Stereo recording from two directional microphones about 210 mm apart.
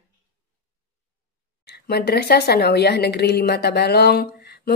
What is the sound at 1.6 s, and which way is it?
A woman's voice, 50° left (ahead or behind).